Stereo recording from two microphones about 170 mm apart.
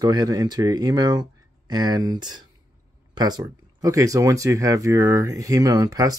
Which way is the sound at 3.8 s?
20° right (ahead or behind).